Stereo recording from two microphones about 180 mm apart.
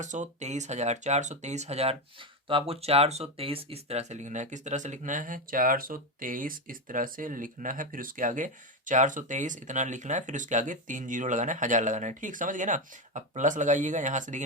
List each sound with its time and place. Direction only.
0.0 s speech: 45° right (ahead or behind)